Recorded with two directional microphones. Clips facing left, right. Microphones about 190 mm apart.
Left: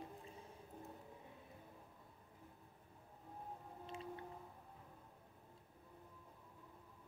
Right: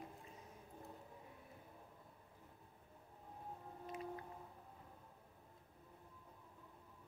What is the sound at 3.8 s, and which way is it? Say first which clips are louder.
Whale vocalization: right 3 dB; 30° left (ahead or behind).